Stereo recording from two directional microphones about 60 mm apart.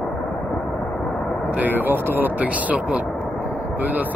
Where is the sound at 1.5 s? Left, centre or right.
Right.